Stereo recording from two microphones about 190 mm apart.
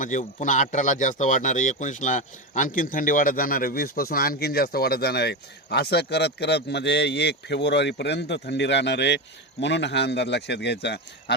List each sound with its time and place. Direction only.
0.0 s speech: 40° left (ahead or behind); by 11.3 s 60° left (ahead or behind)